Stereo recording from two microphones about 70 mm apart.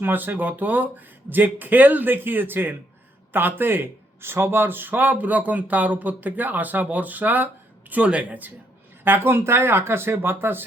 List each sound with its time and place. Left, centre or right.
0.0 s speech: right